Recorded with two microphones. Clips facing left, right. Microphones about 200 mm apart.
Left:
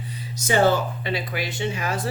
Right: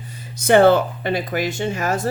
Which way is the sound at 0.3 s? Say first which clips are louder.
Right 7 dB; 60° right (ahead or behind).